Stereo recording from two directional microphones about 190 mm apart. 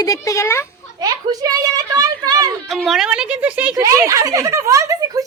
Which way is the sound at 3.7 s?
15° right (ahead or behind).